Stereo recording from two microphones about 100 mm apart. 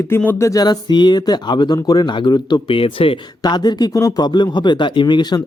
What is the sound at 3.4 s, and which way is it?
Speech, 45° left (ahead or behind).